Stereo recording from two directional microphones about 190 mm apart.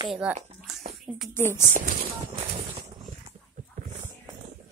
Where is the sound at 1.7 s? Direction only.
35° right (ahead or behind).